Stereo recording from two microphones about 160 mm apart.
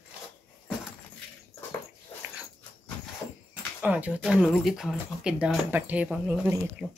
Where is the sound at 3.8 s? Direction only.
10° right (ahead or behind).